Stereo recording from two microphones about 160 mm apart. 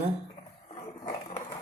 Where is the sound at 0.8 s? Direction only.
35° left (ahead or behind).